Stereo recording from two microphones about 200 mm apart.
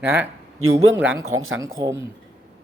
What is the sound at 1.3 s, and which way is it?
Speech, 90° right.